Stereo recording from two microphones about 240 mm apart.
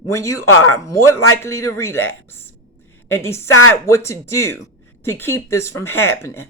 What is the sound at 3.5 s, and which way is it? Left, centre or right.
Speech, left.